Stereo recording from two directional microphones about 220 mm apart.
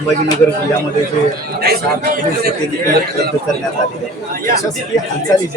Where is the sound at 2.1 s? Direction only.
40° right (ahead or behind).